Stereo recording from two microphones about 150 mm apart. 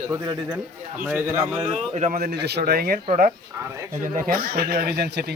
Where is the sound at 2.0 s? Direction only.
80° right.